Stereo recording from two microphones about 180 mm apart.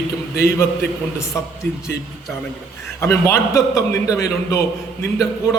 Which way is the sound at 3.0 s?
15° left (ahead or behind).